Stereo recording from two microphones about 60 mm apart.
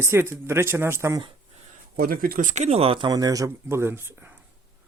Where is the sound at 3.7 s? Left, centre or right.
Right.